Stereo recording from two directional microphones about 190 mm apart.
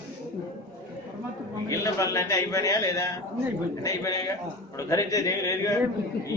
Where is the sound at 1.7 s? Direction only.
15° left (ahead or behind).